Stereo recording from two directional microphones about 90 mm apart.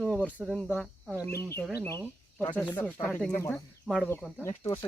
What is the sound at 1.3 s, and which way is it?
Speech, 30° left (ahead or behind).